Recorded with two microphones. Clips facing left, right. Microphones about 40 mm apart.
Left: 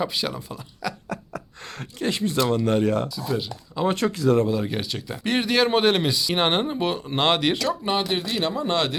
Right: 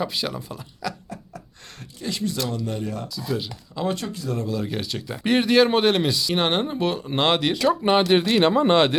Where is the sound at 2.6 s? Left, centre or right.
Left.